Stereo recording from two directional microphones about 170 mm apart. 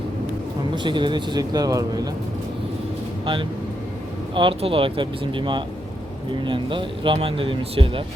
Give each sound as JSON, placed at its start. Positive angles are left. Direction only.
{"t": 0.8, "sound": "speech", "side_deg": -25}
{"t": 4.4, "sound": "speech", "side_deg": -30}